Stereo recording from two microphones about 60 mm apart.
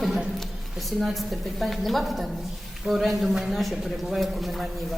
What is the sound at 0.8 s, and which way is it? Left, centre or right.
Speech, centre.